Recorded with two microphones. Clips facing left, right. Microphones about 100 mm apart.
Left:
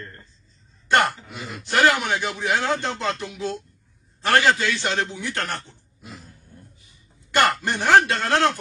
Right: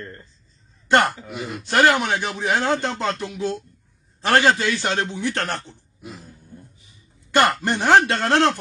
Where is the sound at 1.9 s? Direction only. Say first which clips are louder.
Right 2 dB; 30° right (ahead or behind).